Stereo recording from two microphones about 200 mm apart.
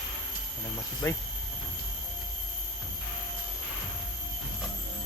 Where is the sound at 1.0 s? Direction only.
15° left (ahead or behind).